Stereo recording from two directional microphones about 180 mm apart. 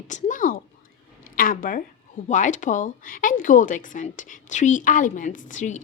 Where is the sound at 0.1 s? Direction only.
45° left (ahead or behind).